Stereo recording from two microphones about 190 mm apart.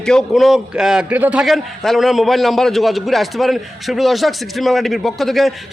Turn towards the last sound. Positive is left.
turn(degrees=0)  # may be behind; listen again after turning